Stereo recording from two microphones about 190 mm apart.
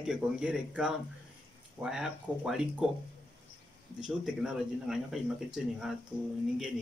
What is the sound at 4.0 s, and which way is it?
Speech, 5° right (ahead or behind).